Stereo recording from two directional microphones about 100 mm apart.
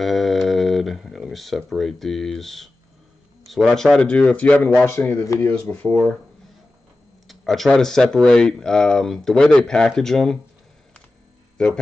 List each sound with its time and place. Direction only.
0.0 s a sound: centre (ahead or behind)
1.7 s speech: centre (ahead or behind); by 6.1 s 15° left (ahead or behind)
7.2 s speech: centre (ahead or behind)
11.5 s speech: 10° left (ahead or behind)